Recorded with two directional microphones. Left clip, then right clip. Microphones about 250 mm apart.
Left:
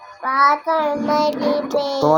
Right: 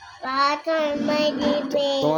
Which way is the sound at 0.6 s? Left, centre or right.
Centre.